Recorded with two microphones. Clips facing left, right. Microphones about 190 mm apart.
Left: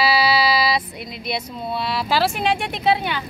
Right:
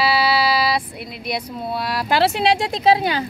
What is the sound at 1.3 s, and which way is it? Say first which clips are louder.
Speech: right 1 dB; 10° right (ahead or behind).